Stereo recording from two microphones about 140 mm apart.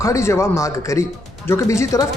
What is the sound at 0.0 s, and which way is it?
Speech, 20° left (ahead or behind).